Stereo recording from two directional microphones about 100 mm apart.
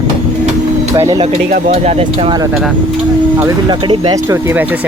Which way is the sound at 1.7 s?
90° right.